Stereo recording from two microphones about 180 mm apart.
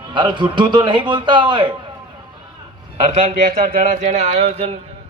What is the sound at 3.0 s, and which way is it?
Speech, 35° right (ahead or behind).